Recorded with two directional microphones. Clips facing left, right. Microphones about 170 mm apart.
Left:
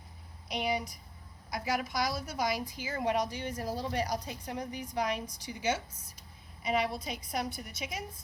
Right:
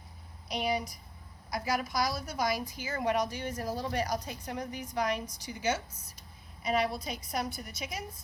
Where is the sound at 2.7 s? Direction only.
15° left (ahead or behind).